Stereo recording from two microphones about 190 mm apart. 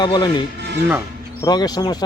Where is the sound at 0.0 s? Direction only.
25° left (ahead or behind).